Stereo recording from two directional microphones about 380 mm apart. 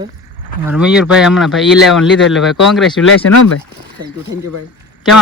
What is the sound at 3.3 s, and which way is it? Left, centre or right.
Speech, left.